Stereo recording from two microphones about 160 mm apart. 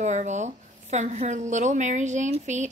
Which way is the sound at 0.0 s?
45° right (ahead or behind).